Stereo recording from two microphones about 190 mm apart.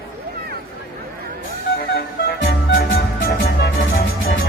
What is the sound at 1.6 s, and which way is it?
Music, 55° left (ahead or behind).